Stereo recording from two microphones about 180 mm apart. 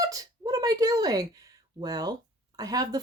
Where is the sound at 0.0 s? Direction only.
20° right (ahead or behind).